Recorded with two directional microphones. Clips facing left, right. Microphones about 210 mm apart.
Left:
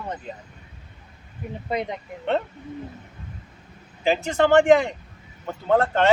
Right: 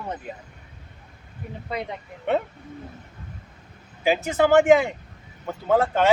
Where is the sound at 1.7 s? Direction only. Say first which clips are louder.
Left 4 dB; 20° left (ahead or behind).